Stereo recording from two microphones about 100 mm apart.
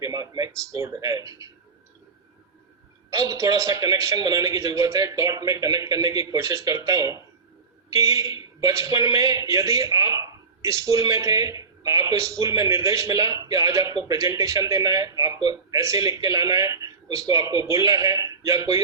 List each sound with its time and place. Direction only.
0.0 s a sound: 40° right (ahead or behind)
0.7 s a man's voice: 30° right (ahead or behind)
3.1 s a man's voice: 30° right (ahead or behind)